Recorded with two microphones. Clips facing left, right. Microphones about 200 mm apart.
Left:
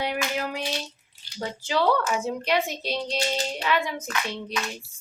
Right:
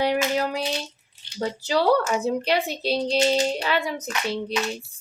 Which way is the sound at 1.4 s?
35° right (ahead or behind).